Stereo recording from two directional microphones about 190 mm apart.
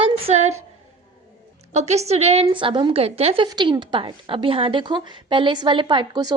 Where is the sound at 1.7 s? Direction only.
35° right (ahead or behind).